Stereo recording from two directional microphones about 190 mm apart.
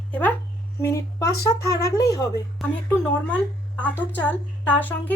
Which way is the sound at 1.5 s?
15° left (ahead or behind).